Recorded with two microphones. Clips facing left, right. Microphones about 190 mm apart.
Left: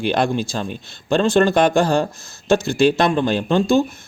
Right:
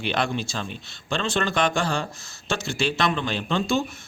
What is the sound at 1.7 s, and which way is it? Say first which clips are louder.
Speech: left 9 dB; 35° left (ahead or behind).